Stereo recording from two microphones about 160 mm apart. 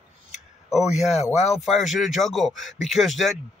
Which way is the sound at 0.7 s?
Centre (ahead or behind).